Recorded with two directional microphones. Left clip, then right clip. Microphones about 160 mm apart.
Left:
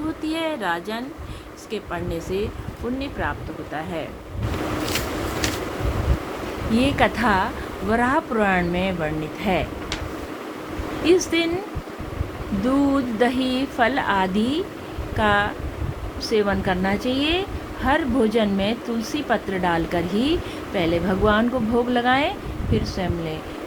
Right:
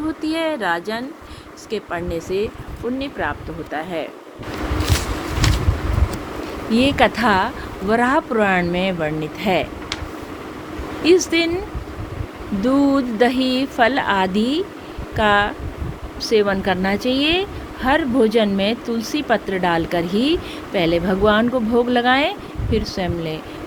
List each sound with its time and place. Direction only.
0.2 s speech: 45° right (ahead or behind)
6.7 s speech: 50° right (ahead or behind)
11.0 s speech: 45° right (ahead or behind)
12.6 s speech: 45° right (ahead or behind)